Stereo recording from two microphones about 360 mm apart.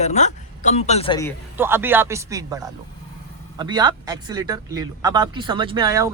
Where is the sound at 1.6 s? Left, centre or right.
Centre.